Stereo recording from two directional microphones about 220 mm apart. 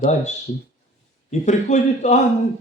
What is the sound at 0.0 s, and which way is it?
A man's voice, 30° left (ahead or behind).